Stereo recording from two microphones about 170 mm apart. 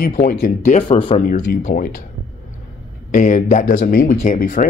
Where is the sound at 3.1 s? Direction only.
45° left (ahead or behind).